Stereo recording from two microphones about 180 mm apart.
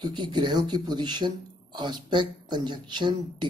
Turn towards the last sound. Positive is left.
turn(degrees=-25)  # may be behind; listen again after turning